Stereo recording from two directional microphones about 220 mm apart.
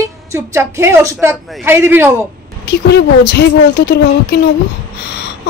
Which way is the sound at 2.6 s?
50° left (ahead or behind).